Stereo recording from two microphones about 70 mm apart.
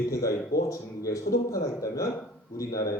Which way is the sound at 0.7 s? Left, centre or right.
Left.